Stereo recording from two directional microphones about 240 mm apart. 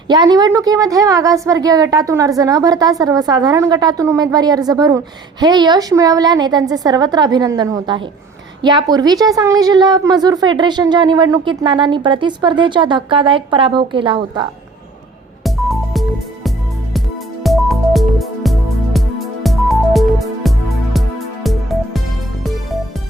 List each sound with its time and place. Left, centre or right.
0.1 s a woman's voice: centre
15.4 s music: centre